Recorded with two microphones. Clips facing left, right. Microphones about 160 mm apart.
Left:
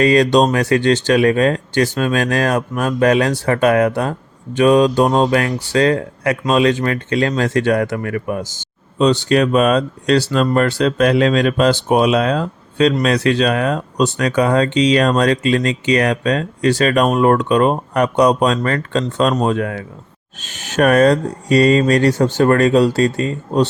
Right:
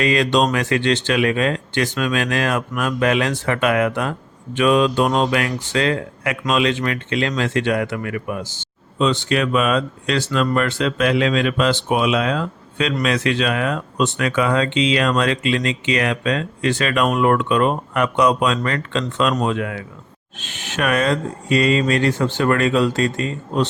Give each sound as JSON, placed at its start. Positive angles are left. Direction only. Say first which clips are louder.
{"t": 0.0, "sound": "speech", "louder": "left 5 dB", "side_deg": 40}